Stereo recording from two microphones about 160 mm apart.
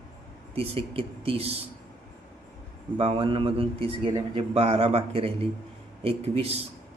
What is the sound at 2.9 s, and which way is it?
Speech, 40° right (ahead or behind).